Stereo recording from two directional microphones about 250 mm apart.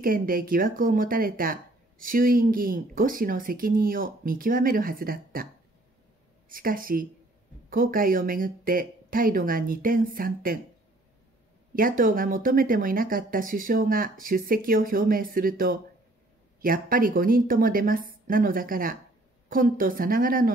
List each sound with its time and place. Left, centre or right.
0.0 s speech: right
6.5 s speech: right
11.7 s speech: right